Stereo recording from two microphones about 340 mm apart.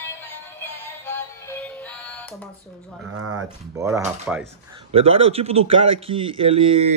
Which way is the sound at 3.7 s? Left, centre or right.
Centre.